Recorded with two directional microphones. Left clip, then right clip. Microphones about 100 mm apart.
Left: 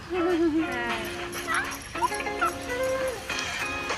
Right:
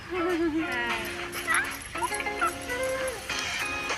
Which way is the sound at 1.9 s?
30° right (ahead or behind).